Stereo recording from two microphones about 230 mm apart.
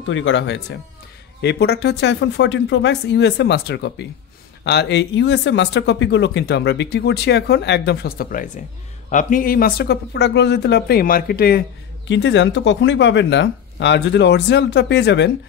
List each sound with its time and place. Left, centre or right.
0.0 s speech: left